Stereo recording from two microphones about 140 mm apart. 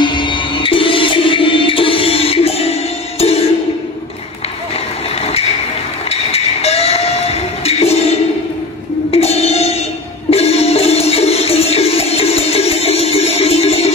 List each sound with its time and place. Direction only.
0.0 s music: 35° left (ahead or behind)
5.2 s a sound: 45° left (ahead or behind)
6.0 s train: 45° left (ahead or behind)
9.1 s music: 45° left (ahead or behind)